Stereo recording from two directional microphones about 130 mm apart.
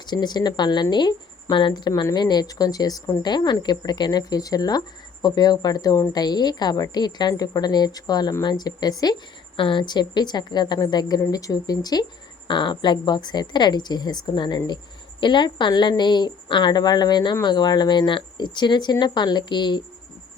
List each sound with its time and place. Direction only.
0.0 s a woman's voice: 35° left (ahead or behind)